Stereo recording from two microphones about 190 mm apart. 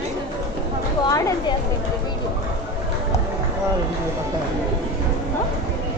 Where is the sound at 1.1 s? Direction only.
20° left (ahead or behind).